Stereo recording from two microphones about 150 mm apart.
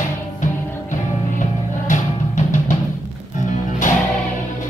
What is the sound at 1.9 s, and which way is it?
Music, 55° left (ahead or behind).